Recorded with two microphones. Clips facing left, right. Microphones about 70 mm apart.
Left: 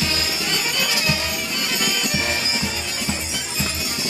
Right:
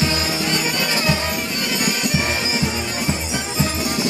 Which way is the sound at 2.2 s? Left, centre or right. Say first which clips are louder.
Right 3 dB; centre.